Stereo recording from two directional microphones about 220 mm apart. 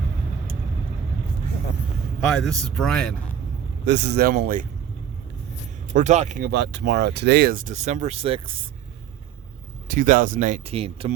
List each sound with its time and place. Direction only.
2.2 s a man's voice: centre (ahead or behind)
3.8 s speech: 50° right (ahead or behind)
5.9 s speech: 35° right (ahead or behind)
9.9 s speech: 35° right (ahead or behind)